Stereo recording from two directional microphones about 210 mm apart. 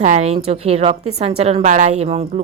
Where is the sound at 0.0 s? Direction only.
35° right (ahead or behind).